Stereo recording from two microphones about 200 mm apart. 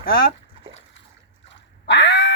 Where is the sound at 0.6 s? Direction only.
25° right (ahead or behind).